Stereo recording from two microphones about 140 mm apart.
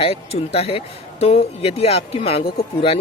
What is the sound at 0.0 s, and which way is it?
A man's voice, 45° left (ahead or behind).